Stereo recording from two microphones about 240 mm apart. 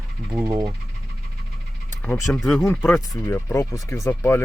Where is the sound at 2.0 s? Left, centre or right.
Centre.